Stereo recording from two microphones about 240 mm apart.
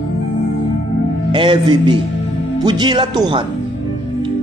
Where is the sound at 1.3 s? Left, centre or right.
Right.